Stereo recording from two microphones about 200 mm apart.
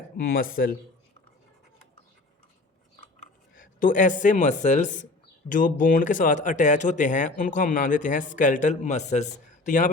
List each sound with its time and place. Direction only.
0.2 s speech: 45° left (ahead or behind)
3.2 s speech: 40° left (ahead or behind)